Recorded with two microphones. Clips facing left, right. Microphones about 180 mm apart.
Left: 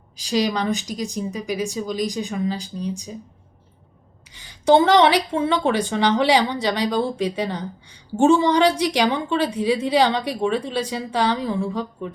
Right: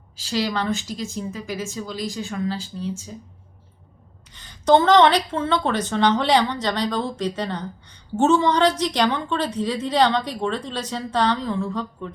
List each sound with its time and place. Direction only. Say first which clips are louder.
0.2 s a woman's voice: left 3 dB; 15° left (ahead or behind)
4.3 s a woman's voice: left 1 dB; 10° left (ahead or behind)